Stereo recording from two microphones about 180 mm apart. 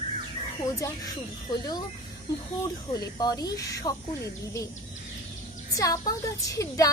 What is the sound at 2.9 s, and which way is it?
A woman's voice, 20° left (ahead or behind).